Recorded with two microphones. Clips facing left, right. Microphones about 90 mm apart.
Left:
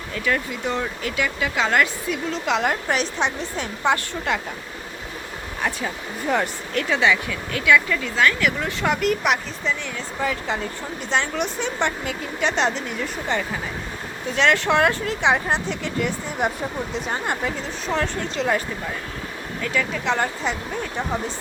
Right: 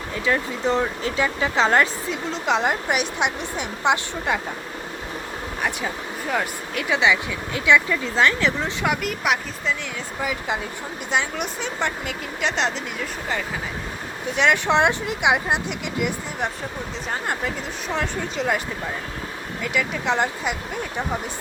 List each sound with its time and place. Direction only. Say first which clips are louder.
0.3 s speech: right 2 dB; 20° right (ahead or behind)
6.2 s speech: left 3 dB; 5° right (ahead or behind); by 8.7 s 25° right (ahead or behind)
8.8 s speech: left 4 dB; 5° right (ahead or behind)
14.3 s speech: even; 15° right (ahead or behind)
16.4 s speech: left 5 dB; 5° left (ahead or behind)
19.6 s speech: even; 10° right (ahead or behind)